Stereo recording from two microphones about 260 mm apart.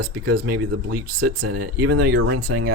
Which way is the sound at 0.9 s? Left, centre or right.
Right.